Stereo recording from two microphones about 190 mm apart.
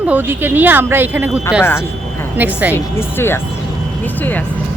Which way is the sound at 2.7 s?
10° left (ahead or behind).